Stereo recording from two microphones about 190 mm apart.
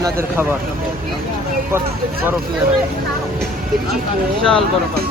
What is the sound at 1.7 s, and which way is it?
Speech, 15° right (ahead or behind).